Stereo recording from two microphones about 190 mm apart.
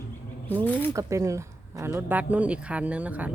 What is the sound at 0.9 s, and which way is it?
Speech, 15° right (ahead or behind).